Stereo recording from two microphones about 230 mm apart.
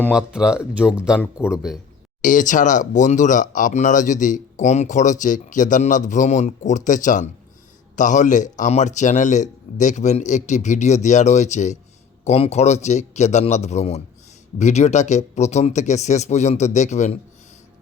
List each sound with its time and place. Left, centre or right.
0.1 s speech: centre
2.2 s speech: left